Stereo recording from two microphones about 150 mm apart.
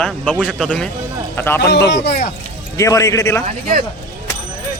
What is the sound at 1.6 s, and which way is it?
Speech, 90° left.